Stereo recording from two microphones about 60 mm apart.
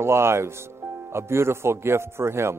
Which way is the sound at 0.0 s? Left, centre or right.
Right.